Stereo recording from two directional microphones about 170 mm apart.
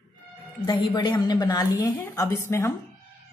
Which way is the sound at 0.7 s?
25° left (ahead or behind).